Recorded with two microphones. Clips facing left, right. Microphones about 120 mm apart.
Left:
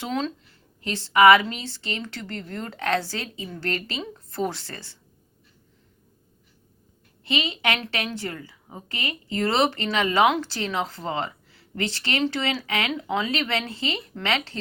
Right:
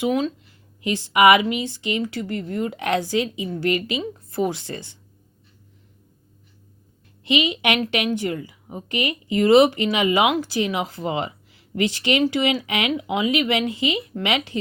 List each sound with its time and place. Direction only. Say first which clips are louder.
0.0 s speech: right 6 dB; 10° right (ahead or behind)
7.3 s speech: right 5 dB; 15° right (ahead or behind)